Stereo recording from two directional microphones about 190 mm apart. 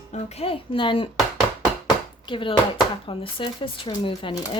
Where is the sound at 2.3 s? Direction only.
25° left (ahead or behind).